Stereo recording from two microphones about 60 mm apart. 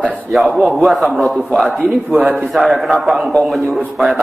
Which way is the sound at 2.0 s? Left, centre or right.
Right.